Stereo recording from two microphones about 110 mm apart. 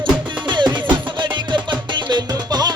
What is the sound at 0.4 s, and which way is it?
Music, 45° right (ahead or behind).